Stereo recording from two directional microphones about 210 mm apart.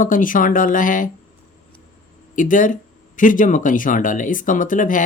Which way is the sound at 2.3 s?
40° left (ahead or behind).